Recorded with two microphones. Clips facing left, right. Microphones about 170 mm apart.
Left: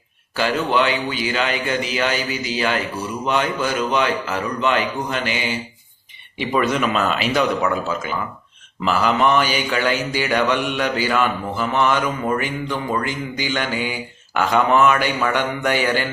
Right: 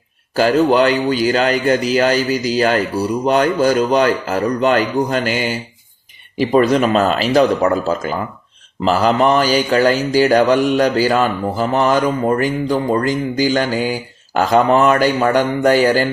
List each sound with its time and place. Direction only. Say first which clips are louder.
0.3 s speech: right 7 dB; 40° right (ahead or behind)